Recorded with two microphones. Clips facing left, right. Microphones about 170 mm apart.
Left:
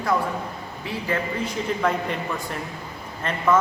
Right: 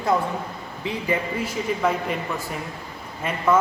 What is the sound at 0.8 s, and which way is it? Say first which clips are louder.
Speech: right 2 dB; 15° right (ahead or behind).